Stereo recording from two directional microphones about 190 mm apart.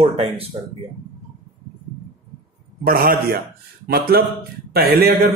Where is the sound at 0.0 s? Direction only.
30° right (ahead or behind).